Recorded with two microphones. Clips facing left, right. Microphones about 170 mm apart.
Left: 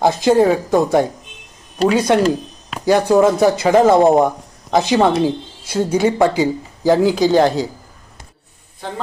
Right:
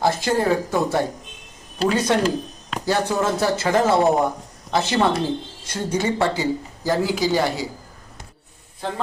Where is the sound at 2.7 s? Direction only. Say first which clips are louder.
Left 7 dB; 15° left (ahead or behind).